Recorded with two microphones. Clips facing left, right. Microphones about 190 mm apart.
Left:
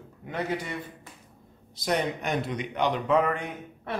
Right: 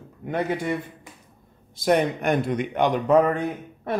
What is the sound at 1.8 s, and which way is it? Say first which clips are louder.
A man's voice: right 7 dB; 55° right (ahead or behind).